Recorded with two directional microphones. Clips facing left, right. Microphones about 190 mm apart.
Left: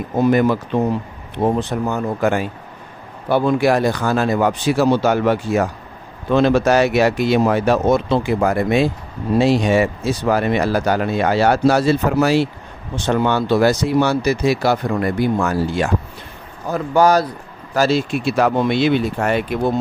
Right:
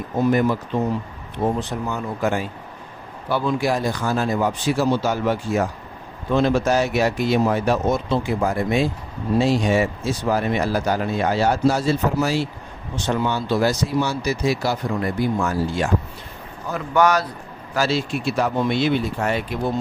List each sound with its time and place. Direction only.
0.2 s speech: 75° left (ahead or behind)
1.6 s speech: 60° left (ahead or behind)
16.7 s speech: 35° left (ahead or behind)
17.7 s speech: 45° left (ahead or behind)
18.2 s speech: 75° left (ahead or behind)